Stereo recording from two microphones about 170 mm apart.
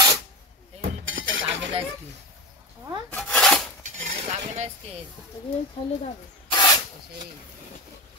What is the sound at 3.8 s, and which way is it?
Cutlery, 40° right (ahead or behind).